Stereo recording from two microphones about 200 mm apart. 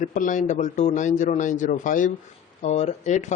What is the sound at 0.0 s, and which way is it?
Speech, 40° left (ahead or behind).